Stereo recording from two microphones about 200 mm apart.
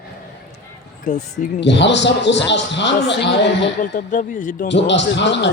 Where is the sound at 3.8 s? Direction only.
40° left (ahead or behind).